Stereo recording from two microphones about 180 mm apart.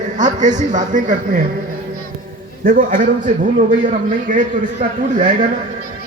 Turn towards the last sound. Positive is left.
turn(degrees=-45)  # may be behind; listen again after turning